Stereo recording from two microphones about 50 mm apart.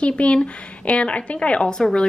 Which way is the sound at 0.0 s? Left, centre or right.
Left.